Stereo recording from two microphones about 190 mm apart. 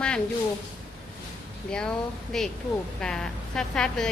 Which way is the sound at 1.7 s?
5° left (ahead or behind).